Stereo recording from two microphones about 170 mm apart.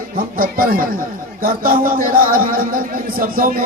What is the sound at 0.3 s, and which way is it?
A man's voice, 55° right (ahead or behind).